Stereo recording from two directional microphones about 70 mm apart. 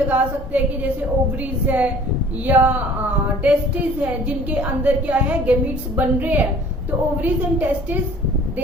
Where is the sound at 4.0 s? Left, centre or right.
Centre.